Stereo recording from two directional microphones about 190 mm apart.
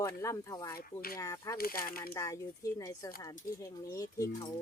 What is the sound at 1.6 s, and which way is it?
Speech, 50° left (ahead or behind).